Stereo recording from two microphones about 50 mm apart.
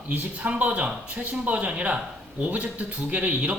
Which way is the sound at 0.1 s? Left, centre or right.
Right.